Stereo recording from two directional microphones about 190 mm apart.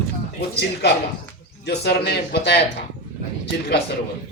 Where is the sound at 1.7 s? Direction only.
60° left (ahead or behind).